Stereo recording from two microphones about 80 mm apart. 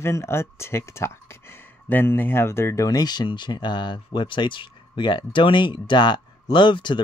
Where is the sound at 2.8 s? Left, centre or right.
Left.